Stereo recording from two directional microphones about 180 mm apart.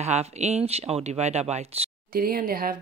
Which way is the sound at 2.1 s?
55° right (ahead or behind).